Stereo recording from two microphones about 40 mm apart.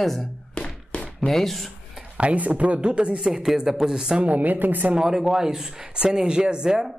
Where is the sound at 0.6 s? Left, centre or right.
Left.